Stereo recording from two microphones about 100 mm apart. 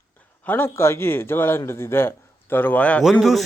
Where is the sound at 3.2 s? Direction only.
Centre (ahead or behind).